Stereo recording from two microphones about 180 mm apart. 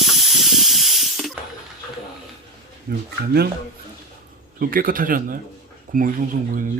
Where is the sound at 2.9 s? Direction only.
55° right (ahead or behind).